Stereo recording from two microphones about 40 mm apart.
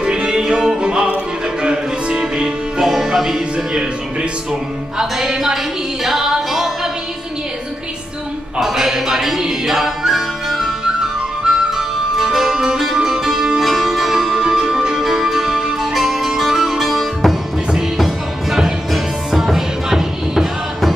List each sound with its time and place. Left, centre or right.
0.0 s music: right
2.8 s music: centre
3.5 s music: right
5.2 s a woman's voice: centre
6.0 s music: centre
8.5 s music: centre
11.4 s flute: centre
12.9 s music: centre
13.6 s music: centre